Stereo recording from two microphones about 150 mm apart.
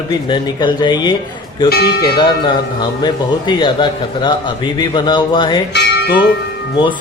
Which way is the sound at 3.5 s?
30° left (ahead or behind).